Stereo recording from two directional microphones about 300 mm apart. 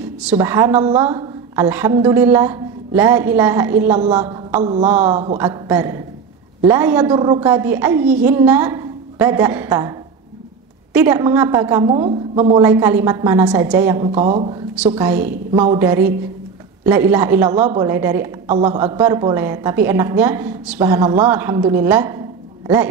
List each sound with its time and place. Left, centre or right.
0.2 s a woman's voice: centre
5.1 s a man's voice: centre
11.0 s a woman's voice: centre
15.0 s a woman's voice: centre